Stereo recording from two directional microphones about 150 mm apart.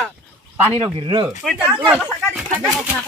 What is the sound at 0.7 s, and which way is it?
Speech, 35° right (ahead or behind).